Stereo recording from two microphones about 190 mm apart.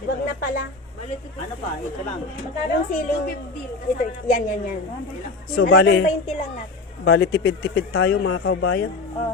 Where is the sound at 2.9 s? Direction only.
45° left (ahead or behind).